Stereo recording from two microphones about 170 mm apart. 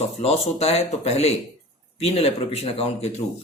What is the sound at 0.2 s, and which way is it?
Speech, 35° left (ahead or behind).